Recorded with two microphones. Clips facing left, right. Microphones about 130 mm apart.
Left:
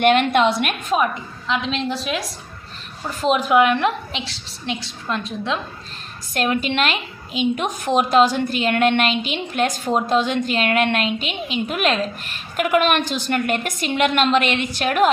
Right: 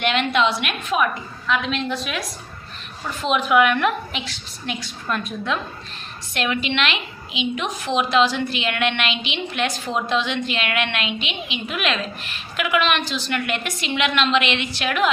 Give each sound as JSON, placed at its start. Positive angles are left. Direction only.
{"t": 0.0, "sound": "a woman's voice", "side_deg": 50}
{"t": 1.5, "sound": "a woman's voice", "side_deg": 30}
{"t": 6.3, "sound": "a woman's voice", "side_deg": 40}